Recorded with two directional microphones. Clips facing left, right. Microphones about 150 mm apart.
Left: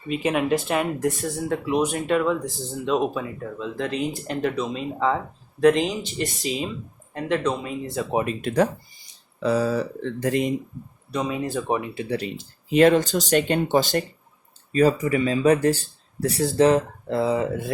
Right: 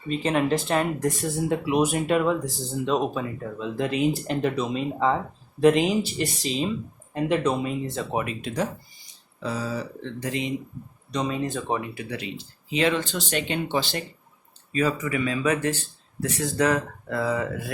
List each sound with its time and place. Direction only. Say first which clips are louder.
0.1 s speech: left 1 dB; 10° left (ahead or behind)
1.5 s speech: even; 10° right (ahead or behind)
8.0 s speech: left 3 dB; 10° left (ahead or behind)
8.4 s speech: left 7 dB; 60° left (ahead or behind)
11.1 s speech: left 1 dB; 10° left (ahead or behind)
11.9 s speech: left 6 dB; 35° left (ahead or behind)